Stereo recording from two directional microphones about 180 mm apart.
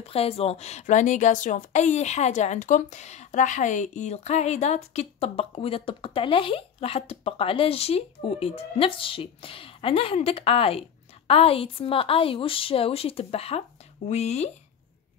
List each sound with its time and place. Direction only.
0.0 s a woman's voice: 35° left (ahead or behind)